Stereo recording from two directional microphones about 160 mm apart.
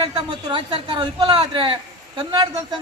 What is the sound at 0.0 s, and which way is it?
Speech, 30° right (ahead or behind).